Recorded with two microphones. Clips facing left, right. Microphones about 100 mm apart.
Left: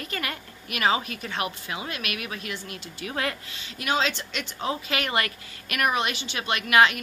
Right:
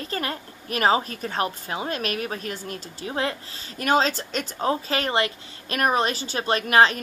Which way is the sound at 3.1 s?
30° right (ahead or behind).